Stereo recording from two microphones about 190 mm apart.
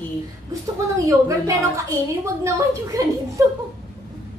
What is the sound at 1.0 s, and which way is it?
Speech, 15° right (ahead or behind).